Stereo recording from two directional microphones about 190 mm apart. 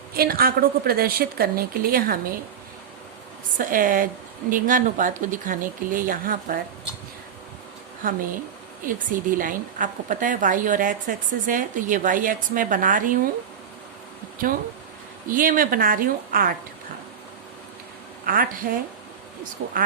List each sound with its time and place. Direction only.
0.1 s a woman's voice: 50° right (ahead or behind)
3.6 s a woman's voice: 45° right (ahead or behind)
8.8 s a woman's voice: 45° right (ahead or behind)
15.3 s a woman's voice: 45° right (ahead or behind)
18.3 s a woman's voice: 45° right (ahead or behind)